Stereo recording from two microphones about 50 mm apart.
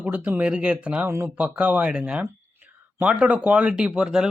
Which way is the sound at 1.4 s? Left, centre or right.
Right.